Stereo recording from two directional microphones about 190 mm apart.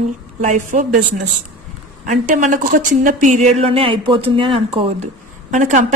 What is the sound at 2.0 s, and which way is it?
Speech, 40° right (ahead or behind).